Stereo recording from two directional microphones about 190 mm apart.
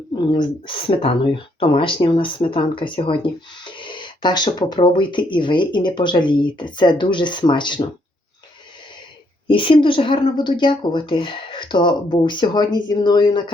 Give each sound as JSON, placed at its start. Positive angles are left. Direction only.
{"t": 0.2, "sound": "speech", "side_deg": 25}
{"t": 9.5, "sound": "speech", "side_deg": 25}